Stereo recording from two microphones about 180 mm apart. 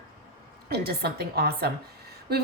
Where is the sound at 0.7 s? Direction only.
60° right (ahead or behind).